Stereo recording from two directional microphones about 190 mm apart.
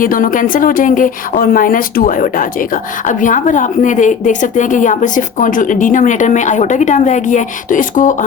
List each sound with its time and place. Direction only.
0.0 s a woman's voice: 45° left (ahead or behind)